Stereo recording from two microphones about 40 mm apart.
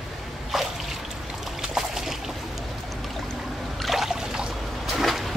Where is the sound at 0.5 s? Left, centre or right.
Centre.